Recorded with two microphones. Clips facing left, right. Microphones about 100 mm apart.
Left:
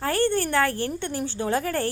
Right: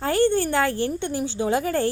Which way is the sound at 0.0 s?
15° right (ahead or behind).